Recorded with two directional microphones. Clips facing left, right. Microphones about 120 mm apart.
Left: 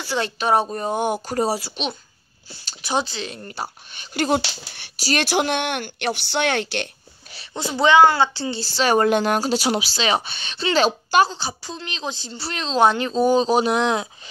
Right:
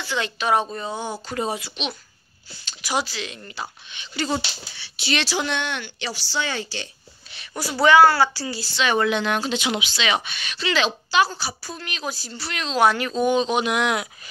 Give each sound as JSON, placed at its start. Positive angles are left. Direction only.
{"t": 0.0, "sound": "speech", "side_deg": 35}
{"t": 1.3, "sound": "a woman's voice", "side_deg": 35}
{"t": 3.3, "sound": "speech", "side_deg": 40}
{"t": 4.9, "sound": "speech", "side_deg": 40}
{"t": 7.5, "sound": "a woman's voice", "side_deg": 20}
{"t": 8.7, "sound": "speech", "side_deg": 40}
{"t": 11.2, "sound": "a woman's voice", "side_deg": 25}